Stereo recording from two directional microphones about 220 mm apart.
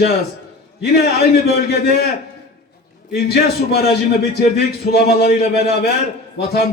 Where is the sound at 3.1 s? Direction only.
45° left (ahead or behind).